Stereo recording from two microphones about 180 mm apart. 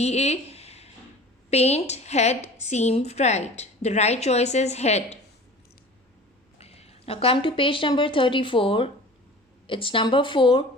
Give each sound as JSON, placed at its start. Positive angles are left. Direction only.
{"t": 0.0, "sound": "a woman's voice", "side_deg": 35}
{"t": 6.6, "sound": "speech", "side_deg": 35}